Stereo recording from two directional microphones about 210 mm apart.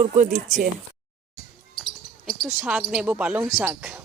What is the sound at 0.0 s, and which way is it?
Speech, 30° right (ahead or behind).